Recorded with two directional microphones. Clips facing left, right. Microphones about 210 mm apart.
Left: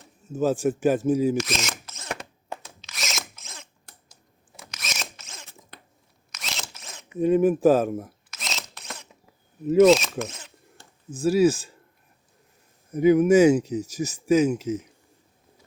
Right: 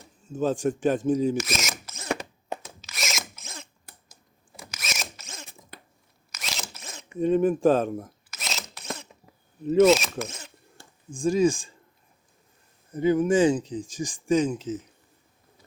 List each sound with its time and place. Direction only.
0.0 s speech: 5° left (ahead or behind)
1.4 s mechanisms: 5° right (ahead or behind)
2.5 s drill: 20° right (ahead or behind)
2.8 s drill: centre (ahead or behind)
4.6 s zipper: 5° right (ahead or behind)
8.4 s camera: 5° right (ahead or behind)
9.6 s speech: centre (ahead or behind)
12.9 s speech: 10° left (ahead or behind)